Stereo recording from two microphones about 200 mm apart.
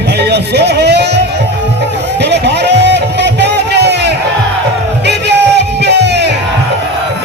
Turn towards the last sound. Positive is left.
turn(degrees=-60)  # may be behind; listen again after turning